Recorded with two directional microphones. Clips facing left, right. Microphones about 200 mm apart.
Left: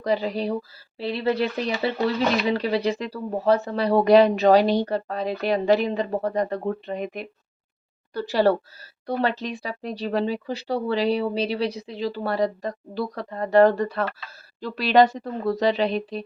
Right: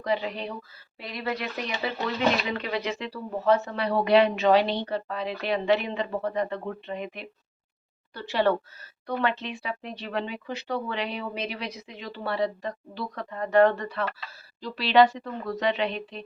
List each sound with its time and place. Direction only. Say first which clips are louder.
0.0 s speech: left 5 dB; 35° left (ahead or behind)